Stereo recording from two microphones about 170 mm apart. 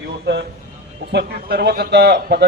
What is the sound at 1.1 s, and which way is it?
Speech, 70° right (ahead or behind).